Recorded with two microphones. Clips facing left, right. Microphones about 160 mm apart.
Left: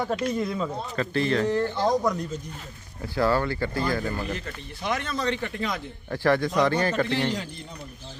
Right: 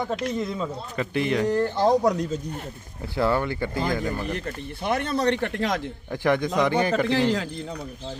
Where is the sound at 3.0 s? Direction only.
20° right (ahead or behind).